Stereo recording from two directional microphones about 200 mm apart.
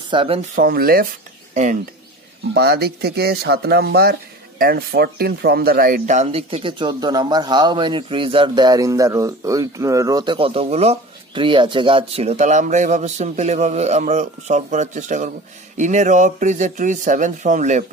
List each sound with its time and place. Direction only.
0.1 s speech: 25° right (ahead or behind)
0.6 s speech: 50° right (ahead or behind)
1.5 s speech: 40° right (ahead or behind)
2.5 s speech: 55° right (ahead or behind); by 17.8 s 40° right (ahead or behind)